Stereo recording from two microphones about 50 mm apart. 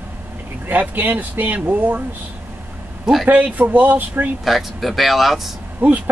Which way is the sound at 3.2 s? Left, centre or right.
Right.